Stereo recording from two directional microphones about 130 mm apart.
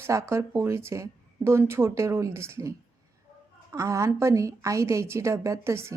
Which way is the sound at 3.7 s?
25° right (ahead or behind).